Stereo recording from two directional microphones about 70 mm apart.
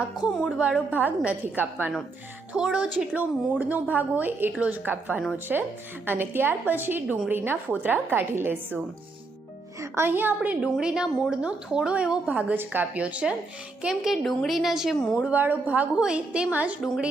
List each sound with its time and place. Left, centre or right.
0.6 s a woman's voice: right
2.6 s speech: centre
3.2 s a woman's voice: right
5.5 s speech: centre
6.1 s a woman's voice: right
10.0 s a woman's voice: right
10.7 s a woman's voice: centre
13.9 s a woman's voice: centre
15.3 s a woman's voice: right